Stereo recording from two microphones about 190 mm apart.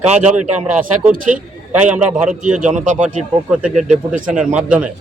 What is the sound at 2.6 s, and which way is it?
Speech, 40° right (ahead or behind).